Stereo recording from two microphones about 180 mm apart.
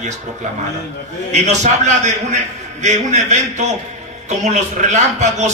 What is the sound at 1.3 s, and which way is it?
A man's voice, 40° right (ahead or behind).